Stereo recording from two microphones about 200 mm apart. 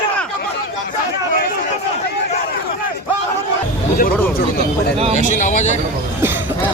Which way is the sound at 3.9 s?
45° left (ahead or behind).